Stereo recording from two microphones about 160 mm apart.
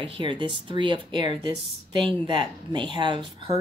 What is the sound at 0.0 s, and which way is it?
Speech, 30° right (ahead or behind).